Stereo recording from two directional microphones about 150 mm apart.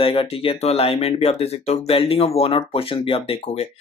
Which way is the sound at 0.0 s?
35° left (ahead or behind).